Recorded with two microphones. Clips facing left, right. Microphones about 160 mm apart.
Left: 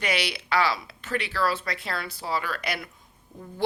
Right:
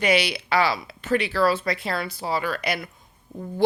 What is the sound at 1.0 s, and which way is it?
Speech, 15° right (ahead or behind).